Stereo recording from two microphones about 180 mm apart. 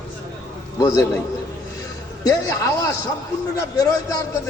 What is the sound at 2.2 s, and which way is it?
A man's voice, 20° left (ahead or behind).